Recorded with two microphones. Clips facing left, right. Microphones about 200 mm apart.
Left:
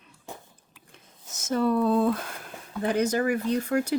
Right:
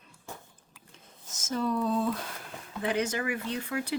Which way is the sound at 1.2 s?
60° left (ahead or behind).